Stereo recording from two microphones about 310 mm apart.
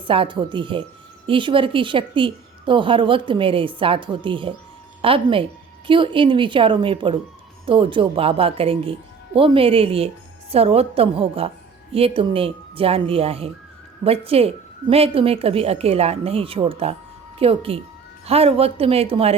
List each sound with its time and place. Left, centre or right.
0.1 s a woman's voice: centre